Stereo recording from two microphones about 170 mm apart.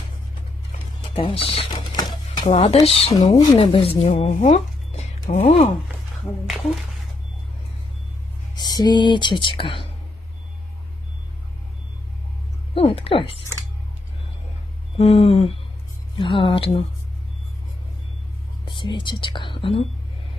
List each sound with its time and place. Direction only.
1.1 s typewriter: 35° left (ahead or behind)
2.5 s speech: 40° left (ahead or behind)
8.5 s speech: 25° left (ahead or behind)
12.7 s speech: 35° left (ahead or behind)
14.9 s speech: 35° left (ahead or behind)
18.6 s speech: 30° left (ahead or behind)